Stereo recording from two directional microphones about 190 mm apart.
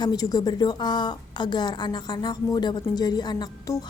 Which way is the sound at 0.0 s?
20° left (ahead or behind).